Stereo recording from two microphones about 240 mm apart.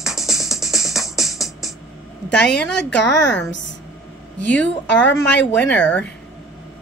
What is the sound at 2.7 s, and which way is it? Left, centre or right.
Speech, left.